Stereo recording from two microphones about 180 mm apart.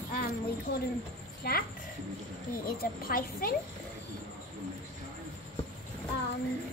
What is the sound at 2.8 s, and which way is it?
Speech, 55° left (ahead or behind).